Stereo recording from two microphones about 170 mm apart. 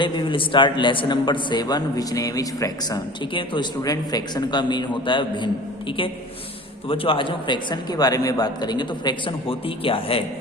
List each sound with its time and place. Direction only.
0.0 s a man's voice: 30° left (ahead or behind)
6.8 s a man's voice: 30° left (ahead or behind)